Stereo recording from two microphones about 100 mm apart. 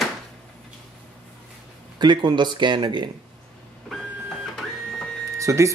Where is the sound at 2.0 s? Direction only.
50° right (ahead or behind).